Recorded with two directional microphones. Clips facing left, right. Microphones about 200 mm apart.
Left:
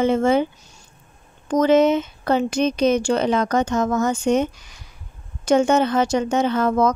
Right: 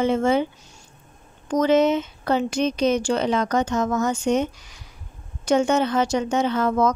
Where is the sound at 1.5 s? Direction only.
50° left (ahead or behind).